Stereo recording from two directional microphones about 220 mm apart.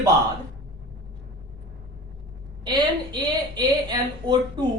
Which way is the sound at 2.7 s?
20° right (ahead or behind).